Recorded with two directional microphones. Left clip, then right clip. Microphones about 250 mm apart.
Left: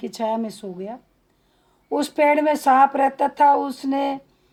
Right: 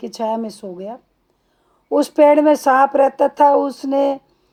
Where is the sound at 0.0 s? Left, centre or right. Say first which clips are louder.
Right 3 dB; right.